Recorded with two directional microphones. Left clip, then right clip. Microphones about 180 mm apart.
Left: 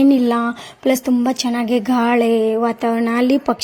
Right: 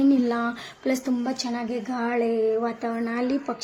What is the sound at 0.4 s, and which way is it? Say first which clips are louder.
Speech: left 8 dB; 45° left (ahead or behind).